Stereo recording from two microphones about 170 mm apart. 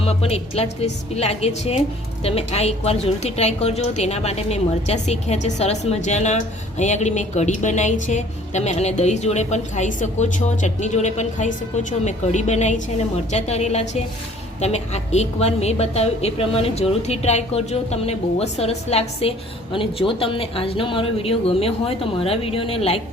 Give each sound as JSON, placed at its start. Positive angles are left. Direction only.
{"t": 0.0, "sound": "a woman's voice", "side_deg": 35}